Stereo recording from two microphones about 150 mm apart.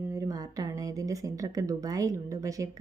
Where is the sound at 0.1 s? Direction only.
25° right (ahead or behind).